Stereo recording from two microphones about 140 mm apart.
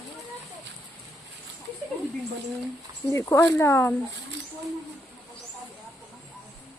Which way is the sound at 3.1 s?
20° left (ahead or behind).